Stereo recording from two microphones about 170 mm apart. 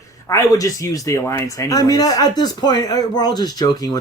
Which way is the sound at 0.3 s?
20° left (ahead or behind).